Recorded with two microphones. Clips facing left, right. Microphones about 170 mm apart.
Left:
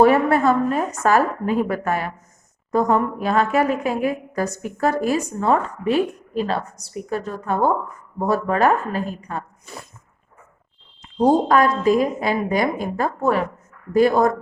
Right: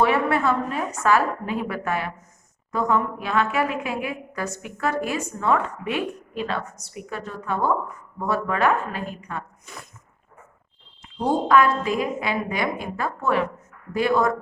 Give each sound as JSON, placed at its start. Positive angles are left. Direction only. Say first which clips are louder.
{"t": 0.0, "sound": "a woman's voice", "louder": "left 5 dB", "side_deg": 40}
{"t": 11.0, "sound": "a woman's voice", "louder": "left 6 dB", "side_deg": 40}